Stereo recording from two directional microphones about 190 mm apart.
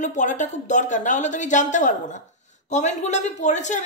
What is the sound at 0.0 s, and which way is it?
Speech, 40° left (ahead or behind).